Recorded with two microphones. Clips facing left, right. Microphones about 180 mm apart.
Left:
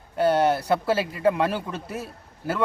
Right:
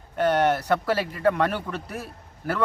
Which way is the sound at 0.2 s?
30° left (ahead or behind).